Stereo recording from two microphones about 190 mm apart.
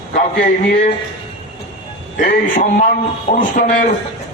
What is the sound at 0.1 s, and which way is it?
Speech, 45° left (ahead or behind).